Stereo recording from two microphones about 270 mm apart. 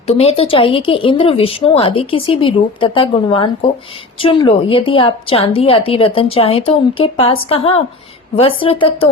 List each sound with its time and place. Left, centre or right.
0.1 s a woman's voice: left